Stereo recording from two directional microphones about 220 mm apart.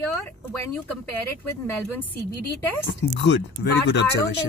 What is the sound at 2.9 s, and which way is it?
Speech, 50° left (ahead or behind).